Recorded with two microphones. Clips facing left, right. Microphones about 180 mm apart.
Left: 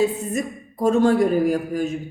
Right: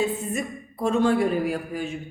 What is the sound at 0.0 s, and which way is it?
A woman's voice, 40° left (ahead or behind).